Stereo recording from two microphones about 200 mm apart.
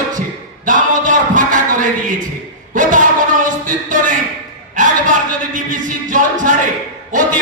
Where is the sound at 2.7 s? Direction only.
40° right (ahead or behind).